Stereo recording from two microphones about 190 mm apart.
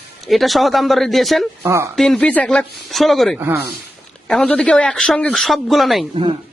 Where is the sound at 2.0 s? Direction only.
5° left (ahead or behind).